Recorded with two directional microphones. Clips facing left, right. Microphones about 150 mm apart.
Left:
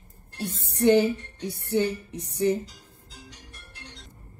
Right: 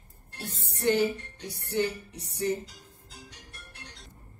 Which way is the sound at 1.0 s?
55° left (ahead or behind).